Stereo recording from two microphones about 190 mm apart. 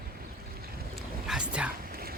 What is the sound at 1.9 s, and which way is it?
Dog, 50° right (ahead or behind).